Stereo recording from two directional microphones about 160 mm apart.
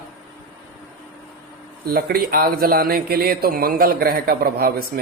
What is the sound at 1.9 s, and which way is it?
A man's voice, 70° right (ahead or behind).